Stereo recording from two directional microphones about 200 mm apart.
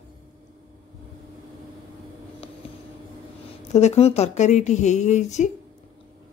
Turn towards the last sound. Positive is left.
turn(degrees=35)  # may be behind; listen again after turning